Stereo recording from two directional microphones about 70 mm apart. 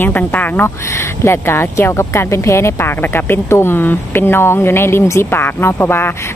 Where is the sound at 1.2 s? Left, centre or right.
Left.